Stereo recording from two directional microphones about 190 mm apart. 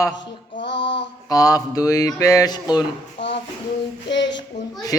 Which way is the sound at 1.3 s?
20° left (ahead or behind).